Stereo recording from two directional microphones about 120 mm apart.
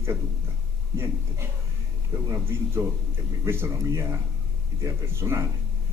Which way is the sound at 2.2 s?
20° right (ahead or behind).